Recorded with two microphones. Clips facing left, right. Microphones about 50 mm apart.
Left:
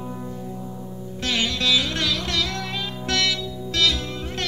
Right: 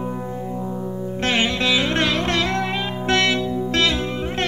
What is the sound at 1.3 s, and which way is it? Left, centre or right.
Music, right.